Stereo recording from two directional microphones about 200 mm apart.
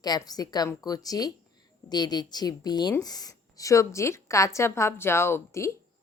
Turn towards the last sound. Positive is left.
turn(degrees=15)  # may be behind; listen again after turning